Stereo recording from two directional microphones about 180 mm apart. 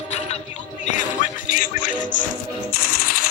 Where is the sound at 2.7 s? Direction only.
55° left (ahead or behind).